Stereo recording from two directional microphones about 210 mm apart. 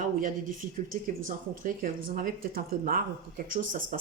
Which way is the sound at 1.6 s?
40° right (ahead or behind).